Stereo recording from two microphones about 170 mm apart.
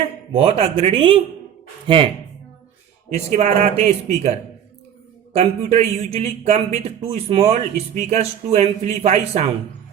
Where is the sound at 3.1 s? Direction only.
40° right (ahead or behind).